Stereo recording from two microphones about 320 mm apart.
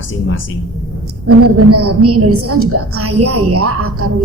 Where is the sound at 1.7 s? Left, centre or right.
Right.